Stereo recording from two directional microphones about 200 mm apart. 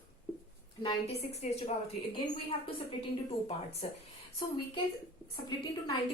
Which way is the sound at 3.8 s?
30° left (ahead or behind).